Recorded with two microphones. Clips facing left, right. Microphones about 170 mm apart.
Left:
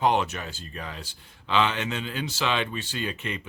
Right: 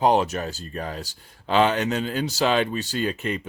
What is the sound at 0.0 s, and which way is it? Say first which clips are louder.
Speech: right 4 dB; 35° right (ahead or behind).